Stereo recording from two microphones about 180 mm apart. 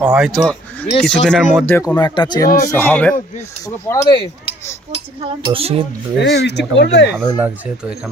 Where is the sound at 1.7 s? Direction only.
10° left (ahead or behind).